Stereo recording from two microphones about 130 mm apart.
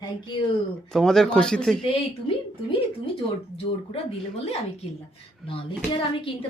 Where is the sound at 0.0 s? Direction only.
35° left (ahead or behind).